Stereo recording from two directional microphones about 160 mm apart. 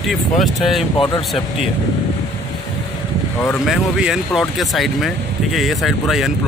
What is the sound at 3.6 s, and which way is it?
Speech, centre (ahead or behind).